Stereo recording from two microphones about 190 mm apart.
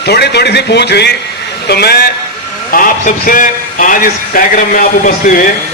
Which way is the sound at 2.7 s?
45° left (ahead or behind).